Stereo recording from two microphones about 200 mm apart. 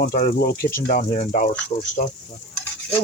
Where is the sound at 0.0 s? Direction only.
45° left (ahead or behind).